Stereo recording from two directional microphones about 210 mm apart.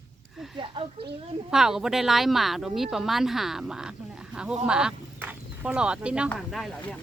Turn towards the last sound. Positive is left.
turn(degrees=0)  # may be behind; listen again after turning